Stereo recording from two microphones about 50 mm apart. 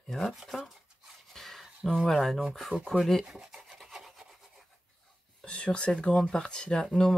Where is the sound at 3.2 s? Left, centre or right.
Centre.